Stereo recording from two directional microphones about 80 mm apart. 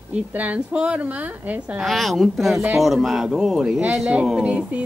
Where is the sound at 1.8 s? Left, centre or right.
Centre.